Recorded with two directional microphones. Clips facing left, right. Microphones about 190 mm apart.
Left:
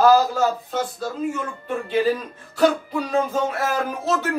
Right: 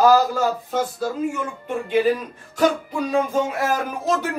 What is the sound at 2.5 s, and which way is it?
Music, 15° right (ahead or behind).